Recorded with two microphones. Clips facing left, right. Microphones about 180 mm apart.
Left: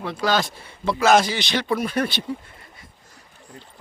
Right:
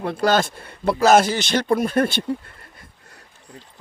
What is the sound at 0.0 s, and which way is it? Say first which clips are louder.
Speech: right 3 dB; 50° right (ahead or behind).